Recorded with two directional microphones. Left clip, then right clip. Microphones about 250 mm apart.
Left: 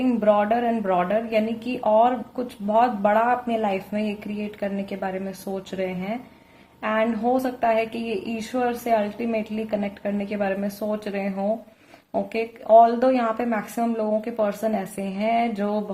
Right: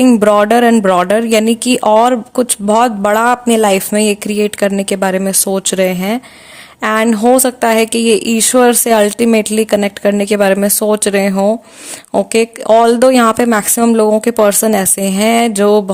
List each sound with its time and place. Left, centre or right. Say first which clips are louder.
0.0 s speech: right 11 dB; right